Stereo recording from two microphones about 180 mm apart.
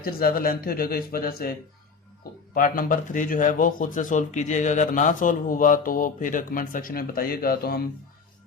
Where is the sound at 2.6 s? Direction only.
45° left (ahead or behind).